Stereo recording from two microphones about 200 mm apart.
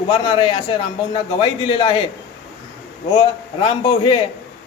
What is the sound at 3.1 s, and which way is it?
A man's voice, 25° left (ahead or behind).